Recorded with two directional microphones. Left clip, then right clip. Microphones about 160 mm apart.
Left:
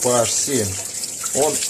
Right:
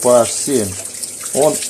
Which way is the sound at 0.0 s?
30° right (ahead or behind).